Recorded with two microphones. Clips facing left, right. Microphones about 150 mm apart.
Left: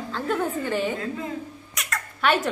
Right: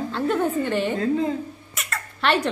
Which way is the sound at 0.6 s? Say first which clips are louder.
Right 2 dB; 5° left (ahead or behind).